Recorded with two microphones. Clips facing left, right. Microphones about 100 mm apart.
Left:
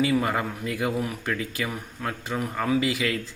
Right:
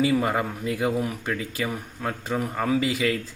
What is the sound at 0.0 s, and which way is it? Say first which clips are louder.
A man's voice: right 1 dB; 25° right (ahead or behind).